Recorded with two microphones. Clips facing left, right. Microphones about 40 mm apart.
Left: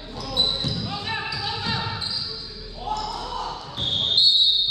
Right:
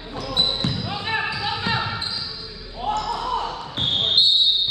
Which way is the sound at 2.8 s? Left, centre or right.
Right.